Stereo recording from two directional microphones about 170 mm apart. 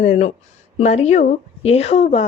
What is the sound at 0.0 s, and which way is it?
A woman's voice, 40° left (ahead or behind).